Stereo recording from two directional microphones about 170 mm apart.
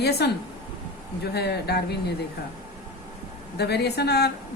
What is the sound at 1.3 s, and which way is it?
Speech, 75° left (ahead or behind).